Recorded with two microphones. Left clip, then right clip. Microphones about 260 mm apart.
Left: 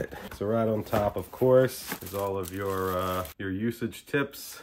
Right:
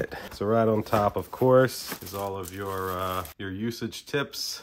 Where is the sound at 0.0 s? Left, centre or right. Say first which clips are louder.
Right 3 dB; right.